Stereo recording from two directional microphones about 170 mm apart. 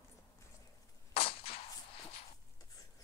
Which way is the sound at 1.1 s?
35° left (ahead or behind).